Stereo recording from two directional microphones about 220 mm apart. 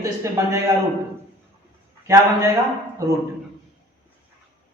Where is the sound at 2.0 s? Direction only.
15° right (ahead or behind).